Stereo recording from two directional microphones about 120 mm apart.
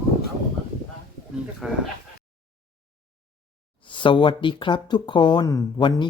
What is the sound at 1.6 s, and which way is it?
Speech, 5° right (ahead or behind).